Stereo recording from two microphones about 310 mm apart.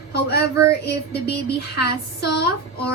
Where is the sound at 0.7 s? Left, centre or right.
Left.